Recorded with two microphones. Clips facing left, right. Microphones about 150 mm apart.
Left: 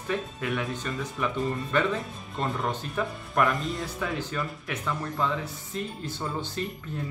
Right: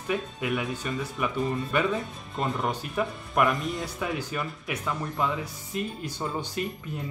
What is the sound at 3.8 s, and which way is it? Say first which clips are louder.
Speech: even; 10° right (ahead or behind).